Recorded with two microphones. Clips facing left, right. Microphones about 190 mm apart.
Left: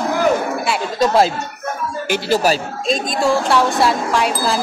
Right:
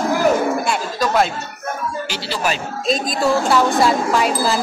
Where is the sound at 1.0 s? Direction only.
30° left (ahead or behind).